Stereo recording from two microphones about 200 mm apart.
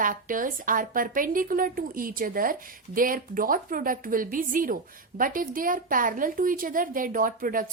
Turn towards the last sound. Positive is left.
turn(degrees=-45)  # may be behind; listen again after turning